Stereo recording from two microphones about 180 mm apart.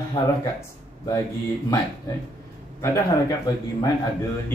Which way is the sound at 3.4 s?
20° left (ahead or behind).